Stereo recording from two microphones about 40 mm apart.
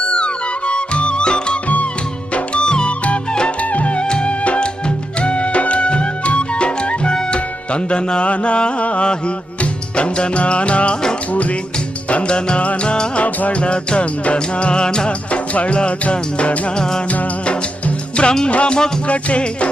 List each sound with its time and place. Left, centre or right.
0.7 s music: left
3.6 s music: left
12.1 s music: left
18.2 s music: left